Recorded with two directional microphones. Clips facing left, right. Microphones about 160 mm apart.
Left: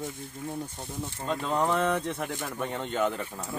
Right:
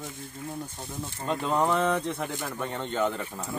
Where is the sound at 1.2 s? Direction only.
5° right (ahead or behind).